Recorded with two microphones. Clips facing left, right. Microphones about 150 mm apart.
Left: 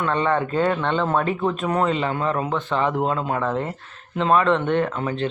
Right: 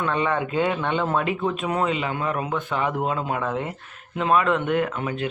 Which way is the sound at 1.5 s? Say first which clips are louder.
Left 2 dB; 5° right (ahead or behind).